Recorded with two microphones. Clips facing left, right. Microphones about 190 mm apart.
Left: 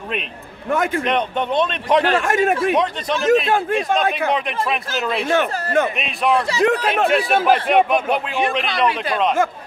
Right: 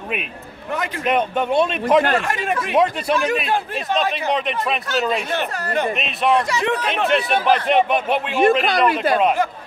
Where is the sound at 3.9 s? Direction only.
50° left (ahead or behind).